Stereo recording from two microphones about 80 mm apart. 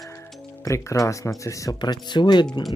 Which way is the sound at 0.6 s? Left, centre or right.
Left.